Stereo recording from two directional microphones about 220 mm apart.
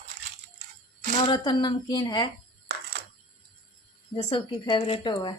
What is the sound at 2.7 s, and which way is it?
Coin, 50° right (ahead or behind).